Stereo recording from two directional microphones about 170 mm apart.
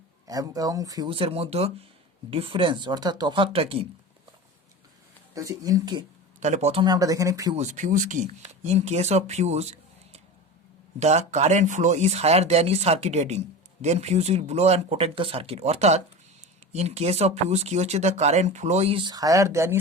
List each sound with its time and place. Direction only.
0.3 s speech: 20° right (ahead or behind)
5.3 s speech: 20° right (ahead or behind)
6.4 s speech: 40° right (ahead or behind)
6.8 s speech: 20° right (ahead or behind)
7.5 s speech: 45° right (ahead or behind); by 19.8 s 15° right (ahead or behind)